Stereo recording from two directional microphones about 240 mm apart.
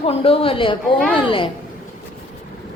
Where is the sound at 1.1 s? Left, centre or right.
Left.